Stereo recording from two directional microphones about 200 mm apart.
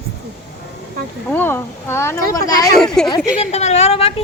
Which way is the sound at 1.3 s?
10° left (ahead or behind).